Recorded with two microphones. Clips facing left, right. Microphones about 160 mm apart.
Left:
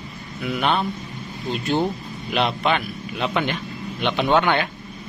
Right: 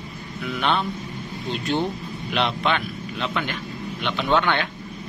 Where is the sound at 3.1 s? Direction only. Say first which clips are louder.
Left 4 dB; 20° left (ahead or behind).